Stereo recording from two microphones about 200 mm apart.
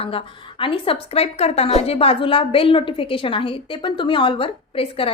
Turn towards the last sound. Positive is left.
turn(degrees=30)  # may be behind; listen again after turning